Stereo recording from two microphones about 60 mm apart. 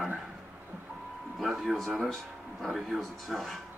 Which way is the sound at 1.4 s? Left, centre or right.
Centre.